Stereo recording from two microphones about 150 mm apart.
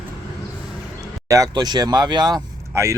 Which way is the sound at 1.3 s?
25° right (ahead or behind).